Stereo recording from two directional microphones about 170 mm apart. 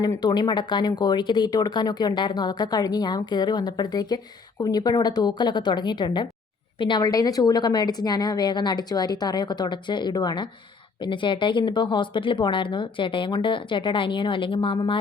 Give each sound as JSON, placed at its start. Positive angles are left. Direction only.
{"t": 0.0, "sound": "speech", "side_deg": 25}